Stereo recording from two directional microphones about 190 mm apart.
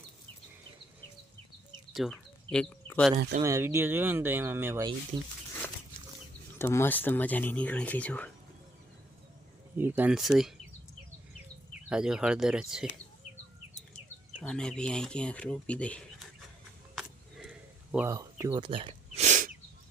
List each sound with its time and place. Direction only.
1.9 s a sound: centre (ahead or behind)
3.4 s speech: 15° right (ahead or behind)
6.6 s speech: 10° left (ahead or behind)
9.7 s speech: 10° right (ahead or behind)
11.9 s speech: 5° right (ahead or behind)
14.3 s speech: 5° left (ahead or behind)
16.9 s a sound: centre (ahead or behind)
17.9 s speech: 15° right (ahead or behind); by 19.5 s 40° right (ahead or behind)